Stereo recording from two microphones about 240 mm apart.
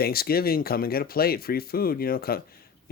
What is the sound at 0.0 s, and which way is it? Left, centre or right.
Speech, left.